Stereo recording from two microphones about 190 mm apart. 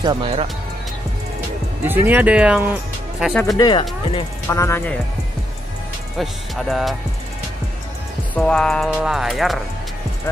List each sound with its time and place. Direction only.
0.0 s speech: 25° right (ahead or behind)
1.9 s speech: 10° right (ahead or behind)
3.5 s speech: 20° left (ahead or behind)
6.1 s speech: centre (ahead or behind)
8.4 s speech: 5° left (ahead or behind)